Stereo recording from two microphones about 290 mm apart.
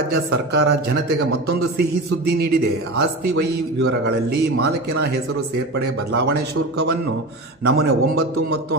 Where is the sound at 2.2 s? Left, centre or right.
Right.